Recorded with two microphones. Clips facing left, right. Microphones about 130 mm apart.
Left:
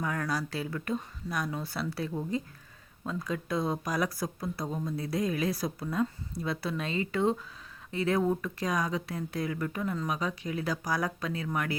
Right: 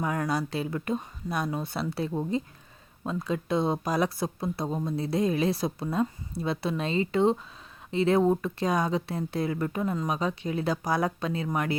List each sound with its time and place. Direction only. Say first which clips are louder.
0.0 s speech: right 4 dB; 25° right (ahead or behind)